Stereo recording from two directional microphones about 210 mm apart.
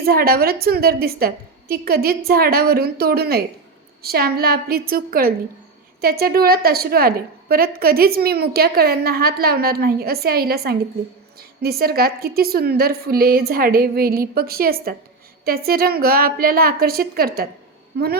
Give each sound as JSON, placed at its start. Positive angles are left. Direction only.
{"t": 0.0, "sound": "a woman's voice", "side_deg": -45}